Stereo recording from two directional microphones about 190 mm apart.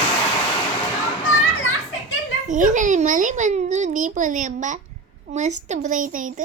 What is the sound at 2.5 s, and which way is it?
A child's voice, 40° right (ahead or behind).